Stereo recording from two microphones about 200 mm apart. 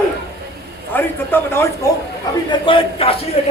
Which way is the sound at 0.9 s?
10° left (ahead or behind).